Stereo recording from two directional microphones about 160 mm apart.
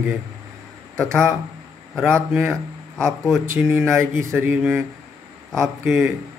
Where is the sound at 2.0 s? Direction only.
15° right (ahead or behind).